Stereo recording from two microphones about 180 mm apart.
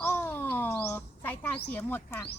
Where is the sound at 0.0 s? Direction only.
15° left (ahead or behind).